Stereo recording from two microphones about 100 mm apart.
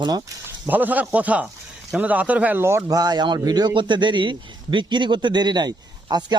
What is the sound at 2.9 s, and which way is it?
A man's voice, 45° right (ahead or behind).